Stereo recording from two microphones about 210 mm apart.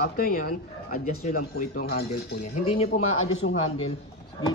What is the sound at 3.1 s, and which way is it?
Speech, 75° left (ahead or behind).